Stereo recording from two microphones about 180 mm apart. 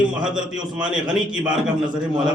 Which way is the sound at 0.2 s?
5° right (ahead or behind).